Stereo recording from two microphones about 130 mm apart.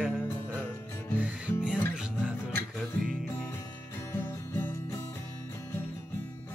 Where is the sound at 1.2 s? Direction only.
10° right (ahead or behind).